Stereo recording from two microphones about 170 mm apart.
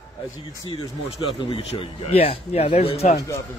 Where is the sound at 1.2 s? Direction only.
30° left (ahead or behind).